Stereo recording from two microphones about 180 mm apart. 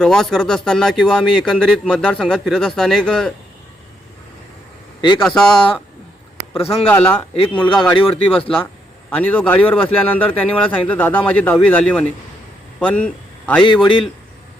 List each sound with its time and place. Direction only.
0.0 s speech: 5° left (ahead or behind)
4.9 s speech: 25° left (ahead or behind)
5.2 s speech: 5° left (ahead or behind)
6.9 s a man's voice: 10° left (ahead or behind)
7.3 s speech: 30° left (ahead or behind)
8.6 s a man's voice: 10° left (ahead or behind)
13.7 s speech: 25° left (ahead or behind)